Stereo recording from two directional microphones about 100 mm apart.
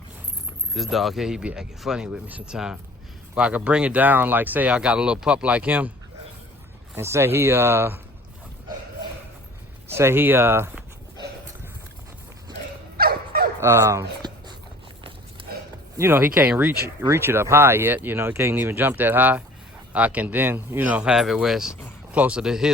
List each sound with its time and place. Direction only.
0.7 s speech: centre (ahead or behind)
6.9 s speech: 25° right (ahead or behind)
9.9 s speech: 25° right (ahead or behind)
13.6 s speech: 25° right (ahead or behind)
14.2 s dog: 45° right (ahead or behind)
16.0 s speech: 20° right (ahead or behind); by 22.7 s 5° right (ahead or behind)